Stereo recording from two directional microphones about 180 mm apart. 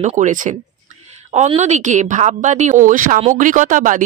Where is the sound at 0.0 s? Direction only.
40° right (ahead or behind).